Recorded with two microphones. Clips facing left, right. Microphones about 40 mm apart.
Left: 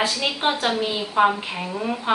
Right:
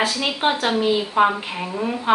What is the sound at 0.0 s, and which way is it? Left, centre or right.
Speech, centre.